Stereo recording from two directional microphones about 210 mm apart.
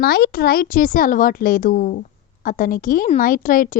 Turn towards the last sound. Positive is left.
turn(degrees=40)  # may be behind; listen again after turning